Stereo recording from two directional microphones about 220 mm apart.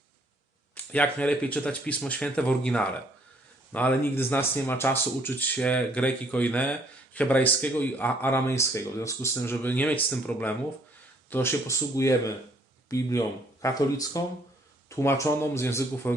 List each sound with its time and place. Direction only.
0.9 s speech: 5° left (ahead or behind)